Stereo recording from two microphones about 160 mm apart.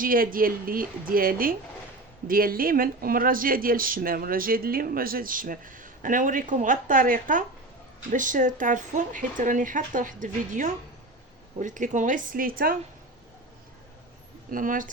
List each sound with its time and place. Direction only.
0.0 s speech: 60° right (ahead or behind)
14.5 s speech: 55° right (ahead or behind)